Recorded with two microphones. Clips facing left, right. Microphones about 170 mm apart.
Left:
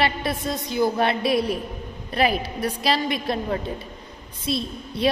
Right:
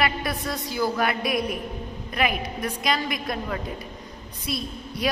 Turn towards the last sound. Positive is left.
turn(degrees=25)  # may be behind; listen again after turning